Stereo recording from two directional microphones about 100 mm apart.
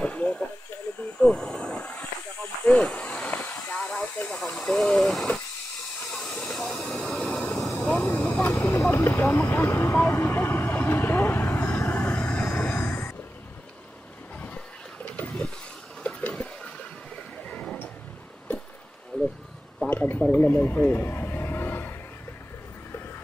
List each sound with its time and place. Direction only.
0.0 s hiss: 15° left (ahead or behind)
1.2 s vehicle: 10° left (ahead or behind)
2.6 s hiss: 10° left (ahead or behind)
6.1 s train: 5° left (ahead or behind)
7.7 s vehicle: 10° left (ahead or behind)
8.5 s vehicle: 25° left (ahead or behind)
14.4 s a sound: 15° left (ahead or behind)
19.1 s a sound: 10° left (ahead or behind)